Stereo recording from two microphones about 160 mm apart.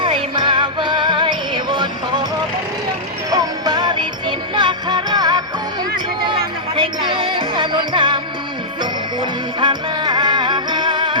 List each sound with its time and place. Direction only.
0.0 s music: 30° right (ahead or behind)
3.3 s music: 25° right (ahead or behind)